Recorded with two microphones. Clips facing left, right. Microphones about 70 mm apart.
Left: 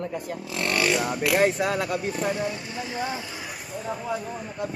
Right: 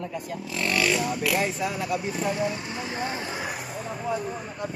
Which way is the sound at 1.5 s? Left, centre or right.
Left.